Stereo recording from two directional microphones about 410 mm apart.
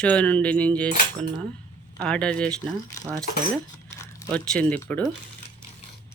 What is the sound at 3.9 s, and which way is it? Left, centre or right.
Biting, centre.